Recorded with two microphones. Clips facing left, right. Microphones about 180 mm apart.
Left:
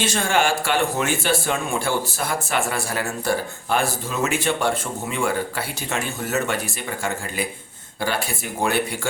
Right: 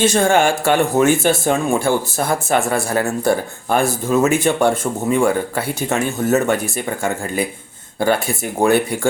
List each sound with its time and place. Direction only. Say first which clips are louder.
0.0 s speech: right 7 dB; 45° right (ahead or behind)
8.6 s speech: right 8 dB; 50° right (ahead or behind)